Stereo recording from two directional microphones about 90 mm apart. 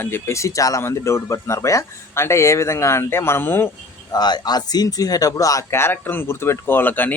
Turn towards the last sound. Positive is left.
turn(degrees=20)  # may be behind; listen again after turning